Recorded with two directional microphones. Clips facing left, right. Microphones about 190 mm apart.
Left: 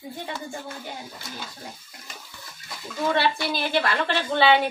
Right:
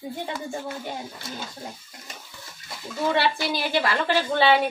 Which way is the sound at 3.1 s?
10° right (ahead or behind).